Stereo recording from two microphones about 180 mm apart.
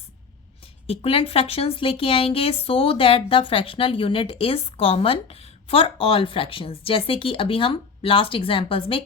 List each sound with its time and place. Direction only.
0.6 s speech: 30° left (ahead or behind)